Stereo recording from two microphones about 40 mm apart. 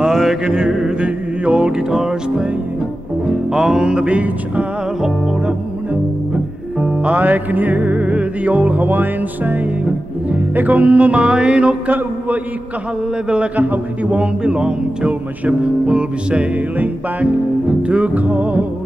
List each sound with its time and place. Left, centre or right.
0.0 s music: centre
0.9 s chant: right
1.7 s music: centre; by 4.6 s right
7.0 s music: right
7.2 s music: right
14.1 s music: right
16.5 s music: right